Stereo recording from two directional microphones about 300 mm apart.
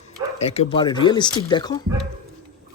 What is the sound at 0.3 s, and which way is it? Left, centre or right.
Speech, left.